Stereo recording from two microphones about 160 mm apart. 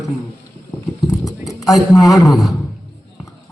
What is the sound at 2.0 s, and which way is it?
Speech, 20° left (ahead or behind).